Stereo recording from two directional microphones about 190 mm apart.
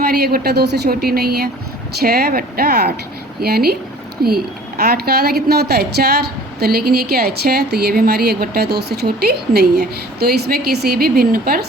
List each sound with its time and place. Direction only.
0.0 s a woman's voice: 55° right (ahead or behind)